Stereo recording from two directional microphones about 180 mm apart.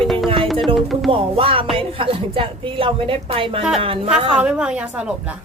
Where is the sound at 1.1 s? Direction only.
30° right (ahead or behind).